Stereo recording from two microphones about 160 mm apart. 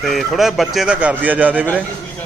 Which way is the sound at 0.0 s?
Centre (ahead or behind).